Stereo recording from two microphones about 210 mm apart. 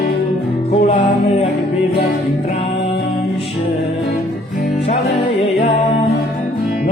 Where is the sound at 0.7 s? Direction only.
25° left (ahead or behind).